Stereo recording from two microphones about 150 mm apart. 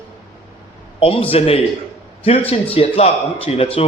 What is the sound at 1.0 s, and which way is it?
A man's voice, 40° left (ahead or behind).